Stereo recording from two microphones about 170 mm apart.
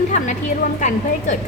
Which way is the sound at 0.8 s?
45° left (ahead or behind).